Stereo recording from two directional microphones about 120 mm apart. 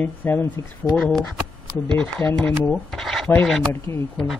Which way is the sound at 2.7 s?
Centre (ahead or behind).